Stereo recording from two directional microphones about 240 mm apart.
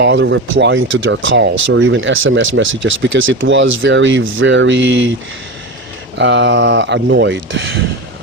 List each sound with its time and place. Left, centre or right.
0.0 s speech: right
6.1 s speech: right